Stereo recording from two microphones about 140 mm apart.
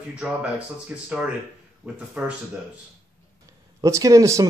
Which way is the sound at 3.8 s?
25° right (ahead or behind).